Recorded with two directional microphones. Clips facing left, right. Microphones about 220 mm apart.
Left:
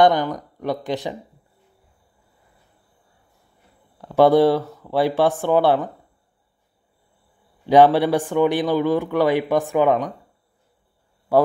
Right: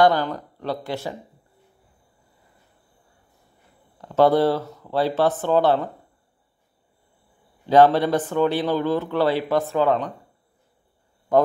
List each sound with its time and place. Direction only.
0.0 s speech: 15° left (ahead or behind)
4.0 s speech: 15° left (ahead or behind)
7.6 s speech: 15° left (ahead or behind)
11.3 s a man's voice: 10° left (ahead or behind)